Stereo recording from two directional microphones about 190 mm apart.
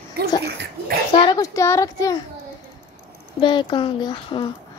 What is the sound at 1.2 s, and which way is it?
A child's voice, 20° left (ahead or behind).